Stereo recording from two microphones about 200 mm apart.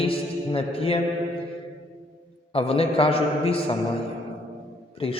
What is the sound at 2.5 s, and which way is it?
A man's voice, 30° left (ahead or behind).